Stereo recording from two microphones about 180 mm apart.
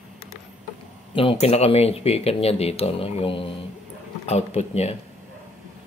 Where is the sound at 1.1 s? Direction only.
30° left (ahead or behind).